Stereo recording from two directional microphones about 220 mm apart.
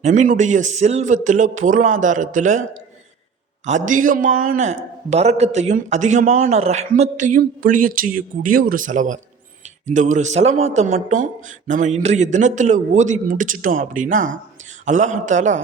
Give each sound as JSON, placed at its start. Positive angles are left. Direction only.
{"t": 0.0, "sound": "a man's voice", "side_deg": -35}
{"t": 3.7, "sound": "a man's voice", "side_deg": -35}